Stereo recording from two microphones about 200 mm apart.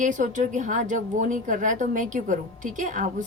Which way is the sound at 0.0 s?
40° right (ahead or behind).